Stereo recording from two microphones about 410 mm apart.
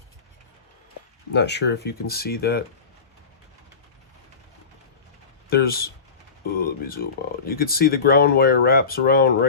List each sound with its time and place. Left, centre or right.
1.3 s speech: left
5.5 s speech: left